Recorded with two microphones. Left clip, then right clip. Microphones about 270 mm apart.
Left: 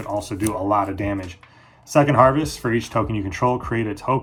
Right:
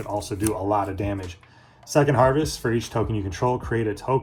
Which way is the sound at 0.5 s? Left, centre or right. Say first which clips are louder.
Left 4 dB; left.